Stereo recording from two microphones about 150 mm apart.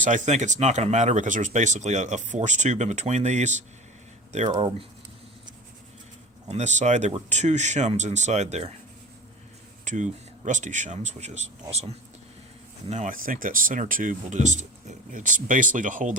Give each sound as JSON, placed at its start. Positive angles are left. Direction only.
{"t": 0.0, "sound": "speech", "side_deg": -55}
{"t": 4.5, "sound": "speech", "side_deg": -35}
{"t": 6.5, "sound": "speech", "side_deg": -50}
{"t": 9.8, "sound": "speech", "side_deg": -55}
{"t": 12.9, "sound": "speech", "side_deg": -60}